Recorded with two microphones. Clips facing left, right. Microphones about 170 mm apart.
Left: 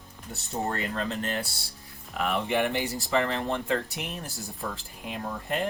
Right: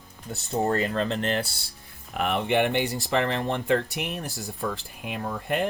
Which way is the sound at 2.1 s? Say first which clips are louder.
Right 3 dB; 65° right (ahead or behind).